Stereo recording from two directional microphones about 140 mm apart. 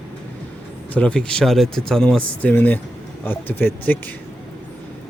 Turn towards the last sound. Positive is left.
turn(degrees=15)  # may be behind; listen again after turning